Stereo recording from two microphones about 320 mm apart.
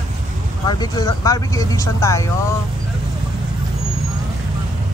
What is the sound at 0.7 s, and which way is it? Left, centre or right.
Speech, centre.